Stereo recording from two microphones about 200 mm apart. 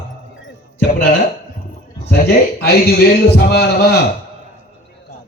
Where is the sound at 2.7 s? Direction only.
50° left (ahead or behind).